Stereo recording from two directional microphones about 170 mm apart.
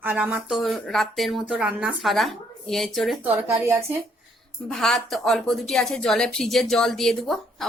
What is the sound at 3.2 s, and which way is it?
Speech, 15° right (ahead or behind).